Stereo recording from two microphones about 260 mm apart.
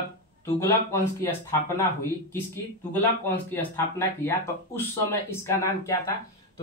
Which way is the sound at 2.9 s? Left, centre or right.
Centre.